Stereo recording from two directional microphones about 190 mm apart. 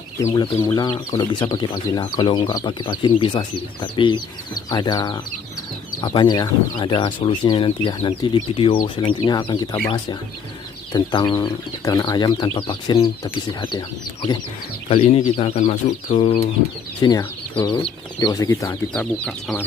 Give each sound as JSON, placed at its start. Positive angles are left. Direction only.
{"t": 0.3, "sound": "speech", "side_deg": 20}
{"t": 10.9, "sound": "speech", "side_deg": 25}
{"t": 14.8, "sound": "speech", "side_deg": 30}
{"t": 17.0, "sound": "speech", "side_deg": 20}
{"t": 18.9, "sound": "speech", "side_deg": 5}